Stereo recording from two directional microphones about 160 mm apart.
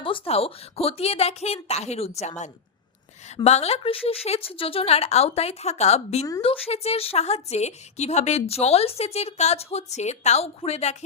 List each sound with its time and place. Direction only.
0.0 s a woman's voice: 35° left (ahead or behind)